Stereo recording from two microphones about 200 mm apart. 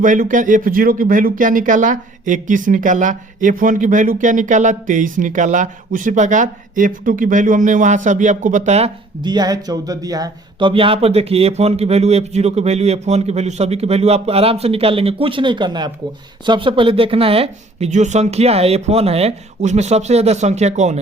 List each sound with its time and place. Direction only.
0.0 s speech: 40° right (ahead or behind)
9.2 s speech: 20° right (ahead or behind)